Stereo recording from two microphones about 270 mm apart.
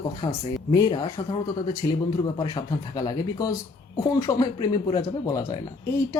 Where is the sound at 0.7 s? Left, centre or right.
Centre.